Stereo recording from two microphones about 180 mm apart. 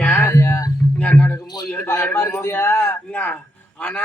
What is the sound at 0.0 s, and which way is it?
Music, 10° left (ahead or behind).